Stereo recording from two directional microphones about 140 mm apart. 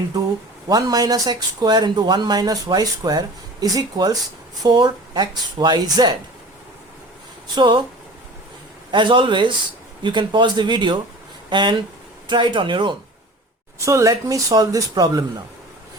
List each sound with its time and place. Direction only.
0.7 s speech: 25° right (ahead or behind)
7.5 s speech: 35° right (ahead or behind)
8.9 s speech: 35° right (ahead or behind)
13.7 s speech: 20° right (ahead or behind)